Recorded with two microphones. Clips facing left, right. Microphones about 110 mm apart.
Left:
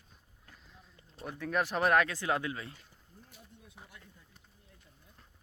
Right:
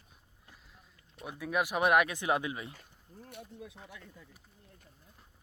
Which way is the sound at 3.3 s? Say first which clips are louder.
Right 15 dB; 80° right.